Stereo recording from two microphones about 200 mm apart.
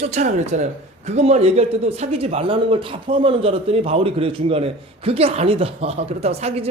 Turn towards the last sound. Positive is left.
turn(degrees=-30)  # may be behind; listen again after turning